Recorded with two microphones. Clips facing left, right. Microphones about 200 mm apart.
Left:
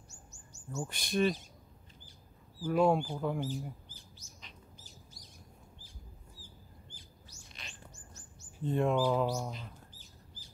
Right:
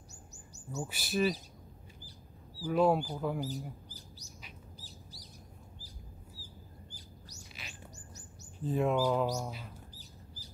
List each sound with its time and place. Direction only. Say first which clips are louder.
0.7 s speech: even; 10° right (ahead or behind)
2.6 s speech: even; 5° right (ahead or behind)
3.3 s speech: left 1 dB; 40° right (ahead or behind)
4.7 s bird: right 4 dB; 35° right (ahead or behind)
6.9 s bird: right 4 dB; 40° right (ahead or behind)
8.6 s speech: even; 5° right (ahead or behind)